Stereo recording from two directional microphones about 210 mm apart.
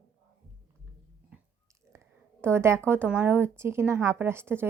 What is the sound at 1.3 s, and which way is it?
Chewing, 5° right (ahead or behind).